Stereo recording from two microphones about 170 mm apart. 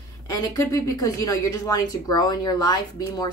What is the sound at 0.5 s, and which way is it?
Speech, 20° left (ahead or behind).